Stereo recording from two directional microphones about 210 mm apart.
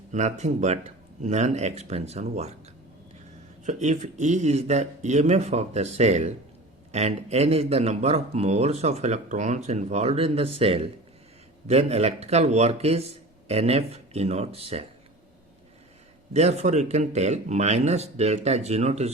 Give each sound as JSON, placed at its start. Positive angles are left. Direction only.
{"t": 0.1, "sound": "speech", "side_deg": -35}
{"t": 3.6, "sound": "speech", "side_deg": -35}
{"t": 16.3, "sound": "speech", "side_deg": -30}